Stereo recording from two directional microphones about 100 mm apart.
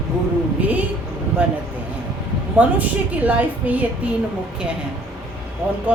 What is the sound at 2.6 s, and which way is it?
A woman's voice, 15° right (ahead or behind).